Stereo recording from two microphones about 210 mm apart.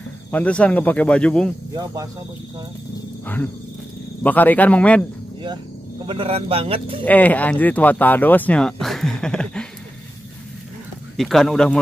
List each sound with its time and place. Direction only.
0.3 s speech: 5° left (ahead or behind)
3.3 s speech: 10° left (ahead or behind)
6.0 s speech: 25° right (ahead or behind)
7.1 s speech: 5° left (ahead or behind)
11.1 s speech: centre (ahead or behind)